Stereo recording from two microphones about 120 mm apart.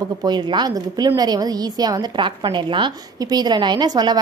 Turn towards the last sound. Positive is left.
turn(degrees=-35)  # may be behind; listen again after turning